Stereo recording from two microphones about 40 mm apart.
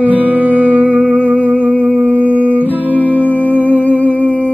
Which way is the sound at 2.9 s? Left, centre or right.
Left.